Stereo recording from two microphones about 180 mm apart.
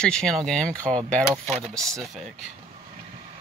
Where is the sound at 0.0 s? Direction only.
5° left (ahead or behind).